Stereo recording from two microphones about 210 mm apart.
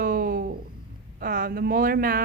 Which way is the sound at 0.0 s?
40° right (ahead or behind).